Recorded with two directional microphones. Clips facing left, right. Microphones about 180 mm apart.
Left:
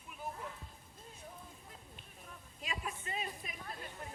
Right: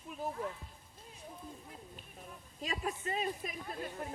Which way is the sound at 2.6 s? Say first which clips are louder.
Right 6 dB; 40° right (ahead or behind).